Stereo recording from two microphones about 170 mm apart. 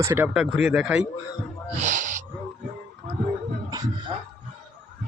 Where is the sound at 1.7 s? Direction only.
45° right (ahead or behind).